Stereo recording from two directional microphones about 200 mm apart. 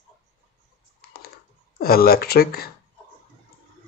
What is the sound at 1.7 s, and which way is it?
Speech, 50° left (ahead or behind).